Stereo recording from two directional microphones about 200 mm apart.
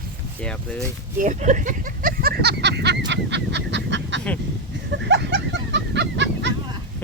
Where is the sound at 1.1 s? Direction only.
40° right (ahead or behind); by 6.5 s 60° right (ahead or behind).